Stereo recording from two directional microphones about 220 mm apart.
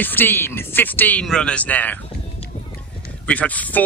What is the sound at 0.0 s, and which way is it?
Speech, 10° left (ahead or behind).